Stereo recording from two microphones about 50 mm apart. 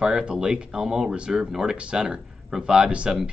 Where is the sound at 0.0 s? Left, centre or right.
Centre.